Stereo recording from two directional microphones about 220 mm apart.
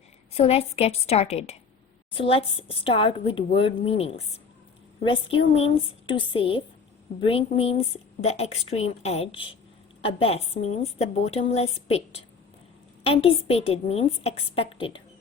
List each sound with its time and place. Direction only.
0.3 s a woman's voice: 30° left (ahead or behind)